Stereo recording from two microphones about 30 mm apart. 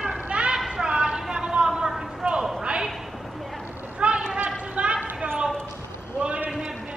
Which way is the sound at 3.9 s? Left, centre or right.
Right.